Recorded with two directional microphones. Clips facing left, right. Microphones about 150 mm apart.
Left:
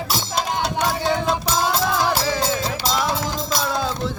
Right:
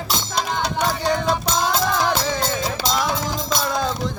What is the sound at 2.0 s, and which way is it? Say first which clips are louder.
Music: even; 5° left (ahead or behind).